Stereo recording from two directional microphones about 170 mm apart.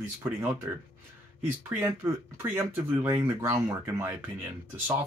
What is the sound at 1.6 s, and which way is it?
Speech, 15° right (ahead or behind).